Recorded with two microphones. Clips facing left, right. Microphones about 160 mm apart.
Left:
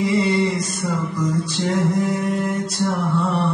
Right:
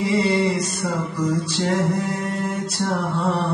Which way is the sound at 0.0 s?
30° right (ahead or behind).